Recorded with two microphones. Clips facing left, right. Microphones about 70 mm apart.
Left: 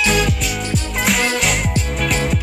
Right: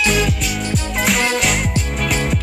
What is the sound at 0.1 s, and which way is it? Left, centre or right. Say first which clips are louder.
Music: even; centre.